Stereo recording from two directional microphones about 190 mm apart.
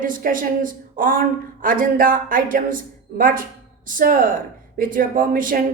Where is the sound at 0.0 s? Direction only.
45° right (ahead or behind).